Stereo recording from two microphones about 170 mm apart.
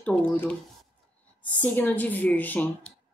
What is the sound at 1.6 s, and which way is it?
A woman's voice, 10° left (ahead or behind).